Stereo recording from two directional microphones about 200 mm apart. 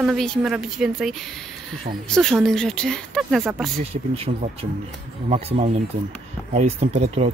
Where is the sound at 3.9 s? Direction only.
30° right (ahead or behind).